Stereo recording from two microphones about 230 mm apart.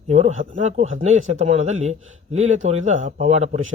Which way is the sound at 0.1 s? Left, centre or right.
Right.